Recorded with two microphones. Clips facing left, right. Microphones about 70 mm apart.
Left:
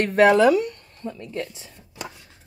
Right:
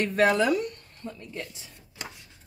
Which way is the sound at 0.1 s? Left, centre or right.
Left.